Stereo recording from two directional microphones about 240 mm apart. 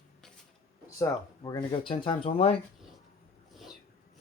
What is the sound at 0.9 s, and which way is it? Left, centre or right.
Speech, centre.